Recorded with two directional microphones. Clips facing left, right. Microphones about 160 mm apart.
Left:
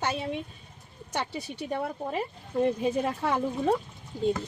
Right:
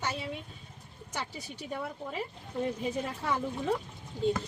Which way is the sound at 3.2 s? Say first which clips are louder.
Left 4 dB; 60° left (ahead or behind).